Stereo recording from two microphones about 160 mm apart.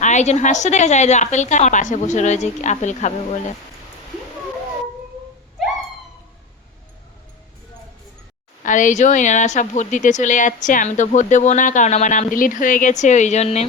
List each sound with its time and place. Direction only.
0.0 s speech: 45° left (ahead or behind)
8.6 s speech: 50° left (ahead or behind)